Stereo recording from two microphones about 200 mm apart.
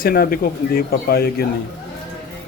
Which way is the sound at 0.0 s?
45° left (ahead or behind).